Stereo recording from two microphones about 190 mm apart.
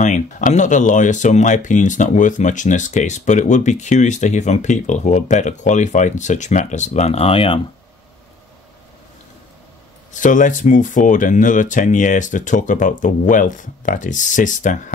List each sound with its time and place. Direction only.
0.0 s speech: 40° left (ahead or behind)
10.1 s speech: 40° left (ahead or behind)